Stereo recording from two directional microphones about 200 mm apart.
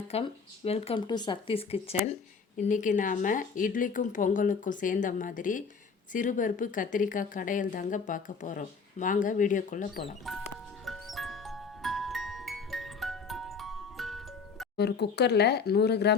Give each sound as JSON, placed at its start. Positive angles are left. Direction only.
{"t": 0.1, "sound": "speech", "side_deg": 30}
{"t": 2.6, "sound": "a woman's voice", "side_deg": 40}
{"t": 10.3, "sound": "speech", "side_deg": 0}
{"t": 10.8, "sound": "music", "side_deg": 0}
{"t": 14.8, "sound": "speech", "side_deg": 55}